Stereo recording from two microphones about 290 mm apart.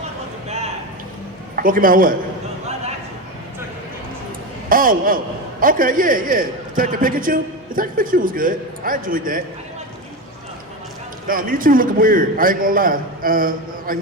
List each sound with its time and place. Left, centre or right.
0.4 s a sound: right
1.5 s a man's voice: right
4.7 s a man's voice: right
11.3 s a man's voice: right